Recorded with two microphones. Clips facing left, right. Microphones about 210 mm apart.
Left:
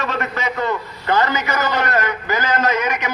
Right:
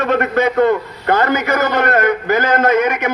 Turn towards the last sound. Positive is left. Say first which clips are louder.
# right 6 dB
turn(degrees=-55)  # may be behind; listen again after turning